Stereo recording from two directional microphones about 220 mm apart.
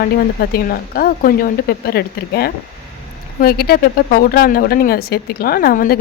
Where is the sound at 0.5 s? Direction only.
40° left (ahead or behind).